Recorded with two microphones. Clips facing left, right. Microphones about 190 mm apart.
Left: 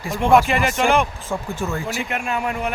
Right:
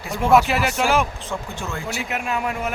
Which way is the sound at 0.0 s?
Centre (ahead or behind).